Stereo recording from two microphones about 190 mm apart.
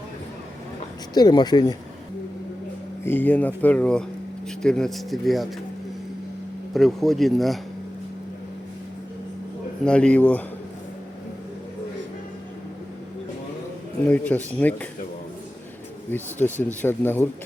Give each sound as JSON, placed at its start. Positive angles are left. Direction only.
{"t": 1.1, "sound": "speech", "side_deg": 20}
{"t": 3.0, "sound": "speech", "side_deg": 10}
{"t": 6.7, "sound": "speech", "side_deg": 0}
{"t": 9.8, "sound": "speech", "side_deg": 5}
{"t": 14.1, "sound": "speech", "side_deg": 10}
{"t": 16.0, "sound": "speech", "side_deg": 10}